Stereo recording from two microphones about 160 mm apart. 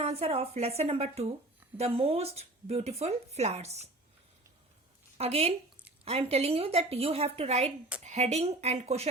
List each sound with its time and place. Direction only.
0.0 s speech: 40° right (ahead or behind)
5.1 s speech: 40° right (ahead or behind)